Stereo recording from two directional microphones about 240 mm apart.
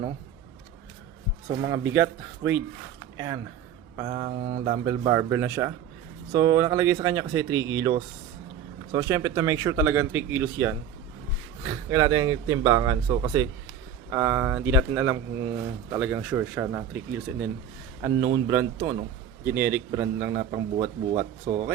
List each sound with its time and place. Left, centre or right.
1.9 s speech: centre
4.3 s mantra: right
4.5 s speech: centre
21.5 s mantra: right